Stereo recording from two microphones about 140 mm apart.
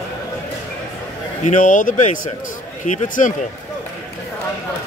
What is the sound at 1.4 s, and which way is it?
Speech, 65° left (ahead or behind).